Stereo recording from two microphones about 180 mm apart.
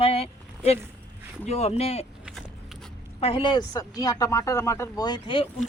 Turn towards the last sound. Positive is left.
turn(degrees=25)  # may be behind; listen again after turning